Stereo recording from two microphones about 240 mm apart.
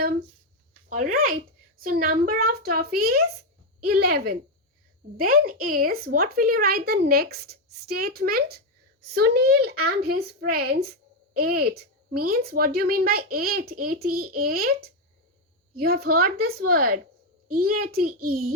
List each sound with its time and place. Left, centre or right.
0.9 s speech: right